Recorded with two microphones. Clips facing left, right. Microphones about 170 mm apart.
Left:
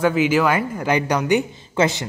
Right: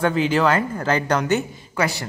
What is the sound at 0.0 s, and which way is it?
Speech, 10° left (ahead or behind).